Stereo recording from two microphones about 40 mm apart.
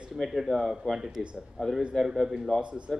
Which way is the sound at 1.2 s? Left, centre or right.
Centre.